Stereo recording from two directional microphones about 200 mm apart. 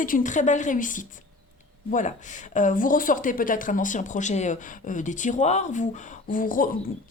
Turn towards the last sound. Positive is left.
turn(degrees=45)  # may be behind; listen again after turning